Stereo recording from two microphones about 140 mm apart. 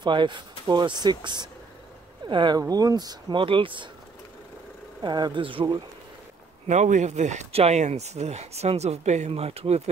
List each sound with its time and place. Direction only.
0.0 s speech: 35° right (ahead or behind)
5.0 s speech: 30° right (ahead or behind)
6.7 s speech: 60° right (ahead or behind)